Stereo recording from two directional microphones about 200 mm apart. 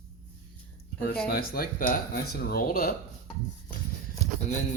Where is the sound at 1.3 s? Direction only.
45° left (ahead or behind).